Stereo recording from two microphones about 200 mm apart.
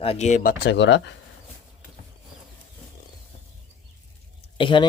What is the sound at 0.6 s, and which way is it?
Speech, 60° left (ahead or behind).